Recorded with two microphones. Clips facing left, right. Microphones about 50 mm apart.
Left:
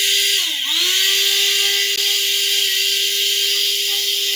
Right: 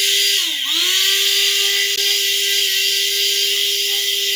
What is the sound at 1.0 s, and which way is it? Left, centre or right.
Tools, centre.